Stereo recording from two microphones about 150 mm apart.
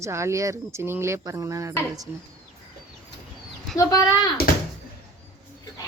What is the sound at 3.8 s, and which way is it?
Speech, 25° left (ahead or behind).